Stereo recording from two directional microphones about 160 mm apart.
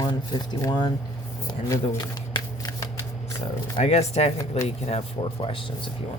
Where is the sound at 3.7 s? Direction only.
45° left (ahead or behind).